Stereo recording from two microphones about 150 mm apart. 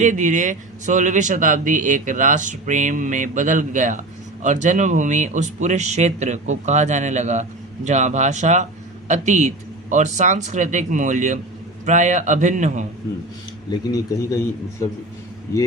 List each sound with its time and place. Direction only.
0.0 s speech: 55° right (ahead or behind)
13.7 s a man's voice: 25° left (ahead or behind)